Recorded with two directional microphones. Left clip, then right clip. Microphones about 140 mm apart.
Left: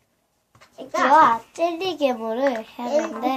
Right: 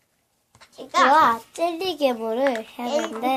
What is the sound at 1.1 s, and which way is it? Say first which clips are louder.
A child's voice: left 2 dB; 35° right (ahead or behind).